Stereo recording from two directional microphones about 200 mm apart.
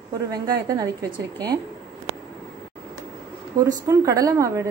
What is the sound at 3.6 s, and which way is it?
A woman's voice, 15° right (ahead or behind).